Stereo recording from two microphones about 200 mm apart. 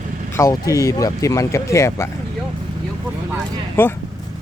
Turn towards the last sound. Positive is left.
turn(degrees=10)  # may be behind; listen again after turning